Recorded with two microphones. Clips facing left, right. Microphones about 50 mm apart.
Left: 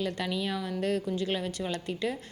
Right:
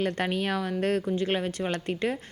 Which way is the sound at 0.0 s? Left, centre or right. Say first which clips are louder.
Right 4 dB; right.